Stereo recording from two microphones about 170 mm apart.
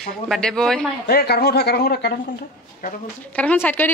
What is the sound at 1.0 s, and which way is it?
Speech, 70° left (ahead or behind).